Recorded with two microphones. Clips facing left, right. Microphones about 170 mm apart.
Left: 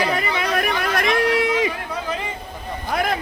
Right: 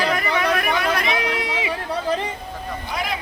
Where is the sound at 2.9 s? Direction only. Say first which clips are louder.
Left 6 dB; 55° left (ahead or behind).